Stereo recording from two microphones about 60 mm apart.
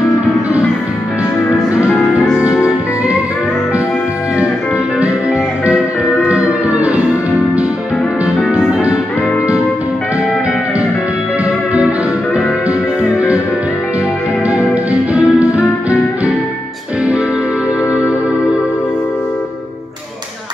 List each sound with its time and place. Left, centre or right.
6.2 s music: right
8.5 s music: centre
14.5 s music: right